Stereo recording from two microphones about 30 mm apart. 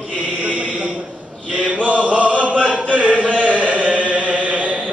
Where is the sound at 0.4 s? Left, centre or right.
Right.